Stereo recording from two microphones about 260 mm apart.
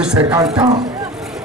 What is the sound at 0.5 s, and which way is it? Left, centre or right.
Speech, centre.